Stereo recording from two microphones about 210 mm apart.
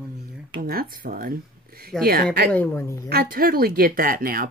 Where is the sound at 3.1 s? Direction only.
45° right (ahead or behind).